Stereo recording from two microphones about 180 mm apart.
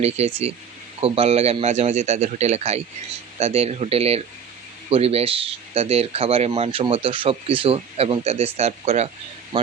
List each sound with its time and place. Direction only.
0.0 s speech: 35° right (ahead or behind)